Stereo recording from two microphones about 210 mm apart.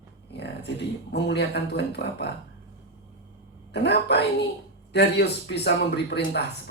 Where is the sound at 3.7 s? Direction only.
55° left (ahead or behind).